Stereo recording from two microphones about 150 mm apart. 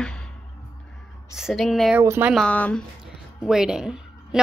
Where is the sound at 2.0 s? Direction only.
15° right (ahead or behind).